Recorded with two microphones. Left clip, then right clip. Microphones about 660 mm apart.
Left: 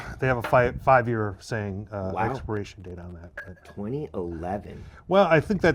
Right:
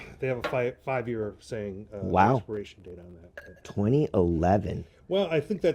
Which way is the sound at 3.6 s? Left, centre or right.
Right.